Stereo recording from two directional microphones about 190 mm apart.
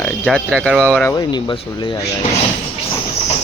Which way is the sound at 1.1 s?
20° left (ahead or behind).